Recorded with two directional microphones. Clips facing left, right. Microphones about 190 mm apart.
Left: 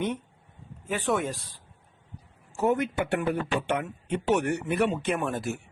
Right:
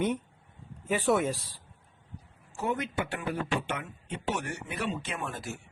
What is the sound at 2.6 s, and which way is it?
A man's voice, 50° left (ahead or behind).